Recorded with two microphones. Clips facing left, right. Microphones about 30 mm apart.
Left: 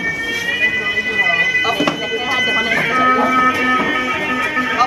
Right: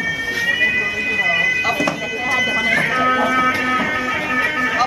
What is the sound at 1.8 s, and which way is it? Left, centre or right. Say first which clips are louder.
Bagpipes: left 2 dB; centre.